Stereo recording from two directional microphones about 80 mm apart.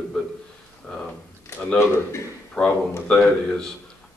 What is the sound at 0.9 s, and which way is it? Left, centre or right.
Speech, centre.